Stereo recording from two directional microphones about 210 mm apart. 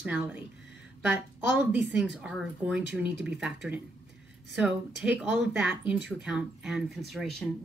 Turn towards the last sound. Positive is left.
turn(degrees=0)  # may be behind; listen again after turning